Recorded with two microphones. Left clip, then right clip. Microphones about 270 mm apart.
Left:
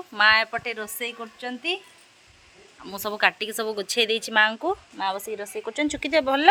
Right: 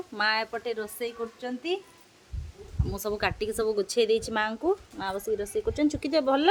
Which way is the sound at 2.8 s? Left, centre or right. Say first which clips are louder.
Left 6 dB; centre.